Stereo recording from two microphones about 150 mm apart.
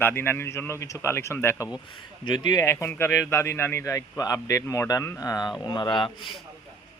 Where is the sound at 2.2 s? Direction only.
30° left (ahead or behind).